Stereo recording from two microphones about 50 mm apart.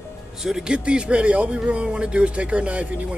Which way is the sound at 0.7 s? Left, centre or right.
Right.